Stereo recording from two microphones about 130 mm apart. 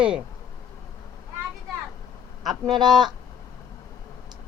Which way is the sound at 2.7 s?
35° right (ahead or behind).